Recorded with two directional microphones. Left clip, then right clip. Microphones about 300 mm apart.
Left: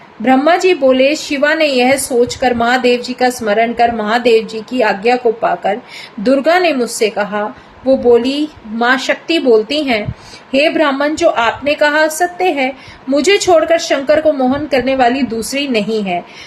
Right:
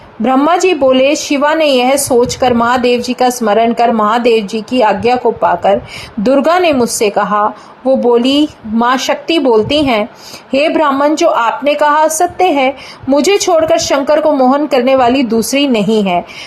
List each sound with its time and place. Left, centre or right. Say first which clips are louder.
0.2 s a woman's voice: right 1 dB; centre
6.2 s a woman's voice: right 2 dB; centre